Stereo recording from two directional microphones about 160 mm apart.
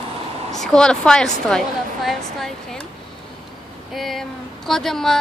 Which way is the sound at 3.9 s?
Centre (ahead or behind).